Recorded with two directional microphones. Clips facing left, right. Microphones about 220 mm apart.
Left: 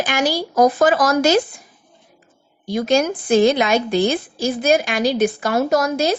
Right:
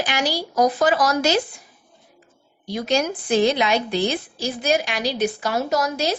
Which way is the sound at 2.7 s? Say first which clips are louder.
Left 5 dB; 50° left (ahead or behind).